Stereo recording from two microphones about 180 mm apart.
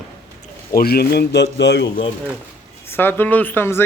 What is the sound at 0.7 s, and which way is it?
Speech, 60° left (ahead or behind).